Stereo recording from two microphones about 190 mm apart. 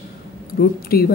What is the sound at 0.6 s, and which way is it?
Speech, 50° left (ahead or behind).